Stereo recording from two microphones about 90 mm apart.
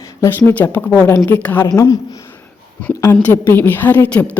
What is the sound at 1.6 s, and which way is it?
Speech, 45° left (ahead or behind).